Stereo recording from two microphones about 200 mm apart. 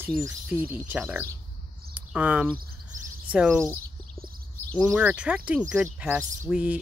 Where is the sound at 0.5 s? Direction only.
10° right (ahead or behind).